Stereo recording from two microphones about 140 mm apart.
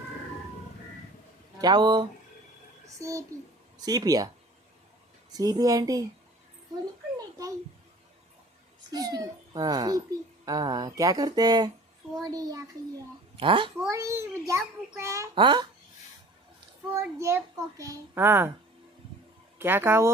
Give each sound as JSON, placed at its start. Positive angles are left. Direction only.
{"t": 1.5, "sound": "a child's voice", "side_deg": -30}
{"t": 5.3, "sound": "a child's voice", "side_deg": -25}
{"t": 7.2, "sound": "a sound", "side_deg": -25}
{"t": 8.9, "sound": "a child's voice", "side_deg": -25}
{"t": 13.3, "sound": "a child's voice", "side_deg": -35}
{"t": 13.9, "sound": "a child's voice", "side_deg": -20}
{"t": 15.4, "sound": "speech", "side_deg": -35}
{"t": 16.9, "sound": "a child's voice", "side_deg": -20}
{"t": 19.5, "sound": "a child's voice", "side_deg": -15}